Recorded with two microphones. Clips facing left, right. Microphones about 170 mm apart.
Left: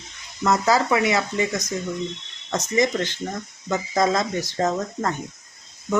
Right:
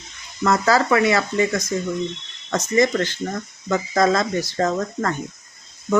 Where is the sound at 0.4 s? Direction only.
15° left (ahead or behind).